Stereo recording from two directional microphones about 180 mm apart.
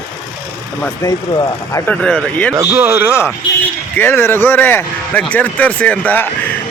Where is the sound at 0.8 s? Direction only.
15° left (ahead or behind).